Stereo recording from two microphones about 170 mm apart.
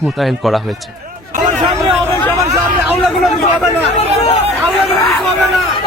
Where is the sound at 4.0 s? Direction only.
40° left (ahead or behind).